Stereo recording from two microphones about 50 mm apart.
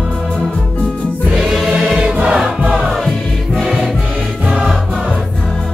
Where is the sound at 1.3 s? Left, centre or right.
Centre.